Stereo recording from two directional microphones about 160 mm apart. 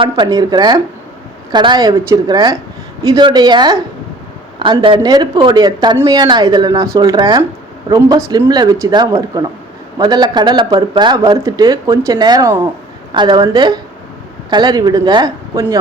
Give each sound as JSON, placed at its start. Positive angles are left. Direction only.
{"t": 0.0, "sound": "a woman's voice", "side_deg": -25}